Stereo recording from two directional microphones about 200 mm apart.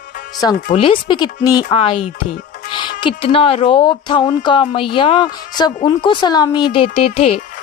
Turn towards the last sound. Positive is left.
turn(degrees=30)  # may be behind; listen again after turning